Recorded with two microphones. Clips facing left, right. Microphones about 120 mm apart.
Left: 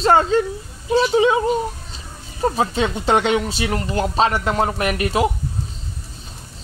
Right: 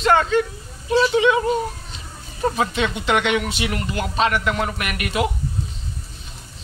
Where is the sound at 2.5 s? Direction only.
35° left (ahead or behind).